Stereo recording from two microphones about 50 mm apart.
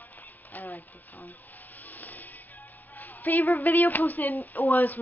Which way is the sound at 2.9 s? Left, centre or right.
Left.